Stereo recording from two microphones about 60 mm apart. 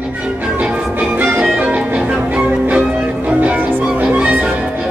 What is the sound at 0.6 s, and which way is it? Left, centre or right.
Music, right.